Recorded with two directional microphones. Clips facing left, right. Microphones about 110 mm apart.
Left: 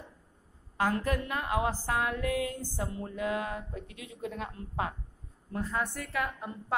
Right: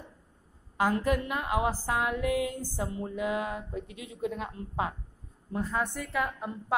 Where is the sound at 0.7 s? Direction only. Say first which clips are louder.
Right 3 dB; 15° right (ahead or behind).